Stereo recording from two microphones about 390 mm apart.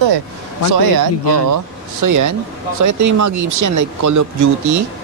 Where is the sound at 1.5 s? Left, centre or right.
Right.